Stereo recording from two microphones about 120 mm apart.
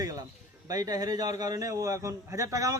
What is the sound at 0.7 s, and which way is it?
A man's voice, 30° right (ahead or behind).